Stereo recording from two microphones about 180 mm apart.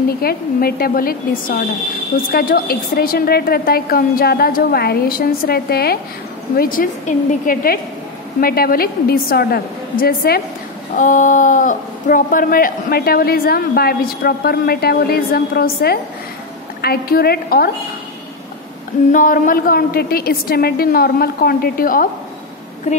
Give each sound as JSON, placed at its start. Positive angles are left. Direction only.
{"t": 0.2, "sound": "a woman's voice", "side_deg": 55}
{"t": 11.0, "sound": "speech", "side_deg": 45}
{"t": 19.1, "sound": "speech", "side_deg": 50}